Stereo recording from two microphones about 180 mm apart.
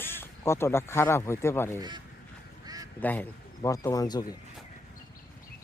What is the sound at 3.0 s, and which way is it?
Speech, 10° left (ahead or behind).